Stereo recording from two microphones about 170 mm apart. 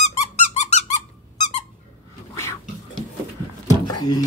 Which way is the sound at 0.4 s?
40° left (ahead or behind).